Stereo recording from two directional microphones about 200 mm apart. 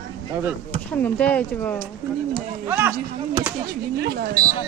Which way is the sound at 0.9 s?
5° left (ahead or behind).